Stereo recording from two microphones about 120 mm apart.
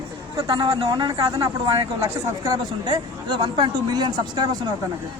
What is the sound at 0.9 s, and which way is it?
Speech, 35° right (ahead or behind).